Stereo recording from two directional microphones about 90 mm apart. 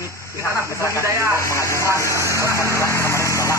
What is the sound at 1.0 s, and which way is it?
Speech, 30° right (ahead or behind).